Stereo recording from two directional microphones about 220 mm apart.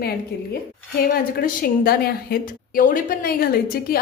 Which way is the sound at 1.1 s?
40° left (ahead or behind).